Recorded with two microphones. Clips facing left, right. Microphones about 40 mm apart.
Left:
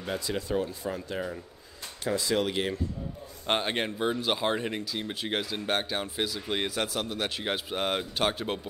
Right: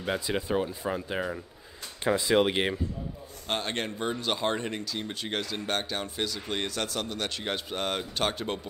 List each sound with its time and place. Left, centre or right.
0.0 s speech: right
3.4 s a man's voice: centre